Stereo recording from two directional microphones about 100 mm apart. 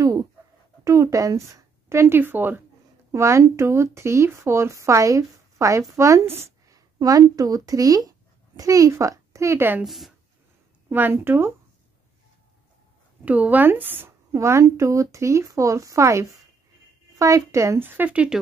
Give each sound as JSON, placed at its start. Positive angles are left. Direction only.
{"t": 0.8, "sound": "speech", "side_deg": -30}
{"t": 7.0, "sound": "speech", "side_deg": -35}
{"t": 9.8, "sound": "a woman's voice", "side_deg": 0}
{"t": 10.9, "sound": "speech", "side_deg": -20}
{"t": 13.2, "sound": "speech", "side_deg": -15}
{"t": 14.3, "sound": "speech", "side_deg": -30}